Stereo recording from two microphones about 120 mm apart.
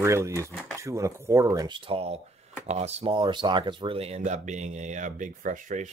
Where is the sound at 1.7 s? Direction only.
50° right (ahead or behind).